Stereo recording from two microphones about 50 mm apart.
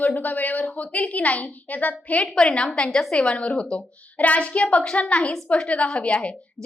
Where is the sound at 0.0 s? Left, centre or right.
Left.